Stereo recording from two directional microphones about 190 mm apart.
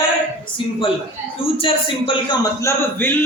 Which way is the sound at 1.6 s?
30° left (ahead or behind).